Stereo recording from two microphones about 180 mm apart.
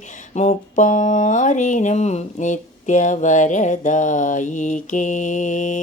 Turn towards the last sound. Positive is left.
turn(degrees=45)  # may be behind; listen again after turning